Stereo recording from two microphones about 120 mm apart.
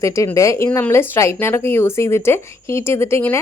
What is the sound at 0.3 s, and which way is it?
Speech, 25° left (ahead or behind).